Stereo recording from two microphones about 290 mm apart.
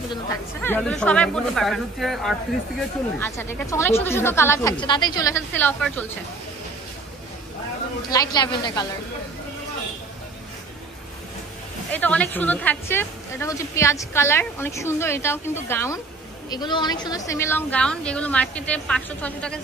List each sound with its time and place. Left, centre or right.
0.1 s a woman's voice: centre
8.1 s a woman's voice: centre
11.9 s a woman's voice: centre